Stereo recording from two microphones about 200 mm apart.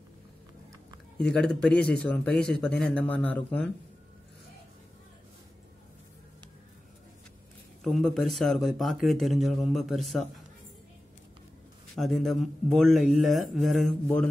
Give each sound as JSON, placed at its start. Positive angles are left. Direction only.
{"t": 1.1, "sound": "speech", "side_deg": 5}
{"t": 7.8, "sound": "speech", "side_deg": 0}
{"t": 11.9, "sound": "speech", "side_deg": 0}